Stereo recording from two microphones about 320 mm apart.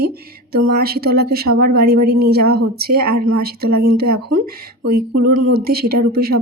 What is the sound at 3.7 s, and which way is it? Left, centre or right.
Speech, right.